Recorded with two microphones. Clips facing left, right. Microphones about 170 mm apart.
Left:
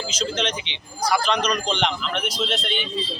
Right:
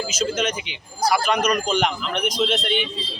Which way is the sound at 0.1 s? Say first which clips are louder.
Even; 10° right (ahead or behind).